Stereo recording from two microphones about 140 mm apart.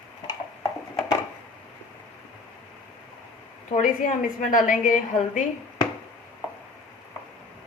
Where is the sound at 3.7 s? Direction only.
70° left (ahead or behind).